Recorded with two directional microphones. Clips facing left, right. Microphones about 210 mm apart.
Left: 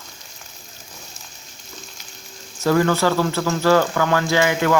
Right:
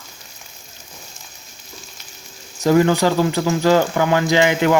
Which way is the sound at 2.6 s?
15° right (ahead or behind).